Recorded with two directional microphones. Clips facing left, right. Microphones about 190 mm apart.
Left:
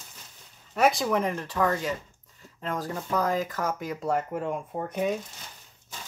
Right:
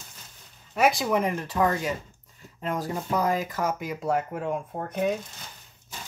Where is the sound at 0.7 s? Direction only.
5° right (ahead or behind).